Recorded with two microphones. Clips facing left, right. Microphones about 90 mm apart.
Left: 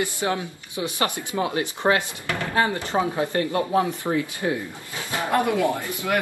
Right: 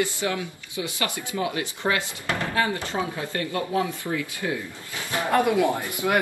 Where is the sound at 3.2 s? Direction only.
30° left (ahead or behind).